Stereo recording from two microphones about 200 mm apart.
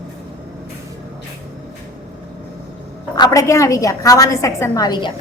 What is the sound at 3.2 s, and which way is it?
A woman's voice, 15° left (ahead or behind).